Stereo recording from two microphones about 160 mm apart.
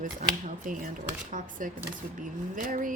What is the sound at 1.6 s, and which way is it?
Speech, 55° right (ahead or behind).